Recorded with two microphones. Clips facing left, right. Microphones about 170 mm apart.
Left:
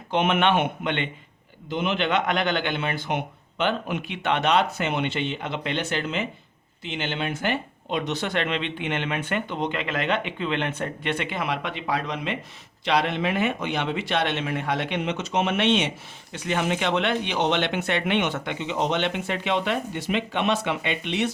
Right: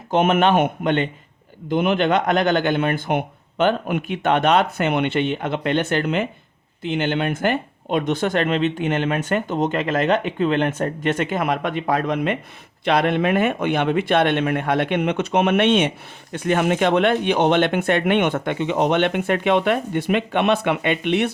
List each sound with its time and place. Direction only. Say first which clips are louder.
0.1 s speech: right 5 dB; 45° right (ahead or behind)
1.6 s speech: right 7 dB; 55° right (ahead or behind)